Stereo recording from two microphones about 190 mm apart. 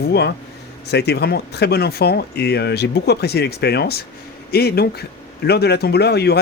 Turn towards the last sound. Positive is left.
turn(degrees=60)  # may be behind; listen again after turning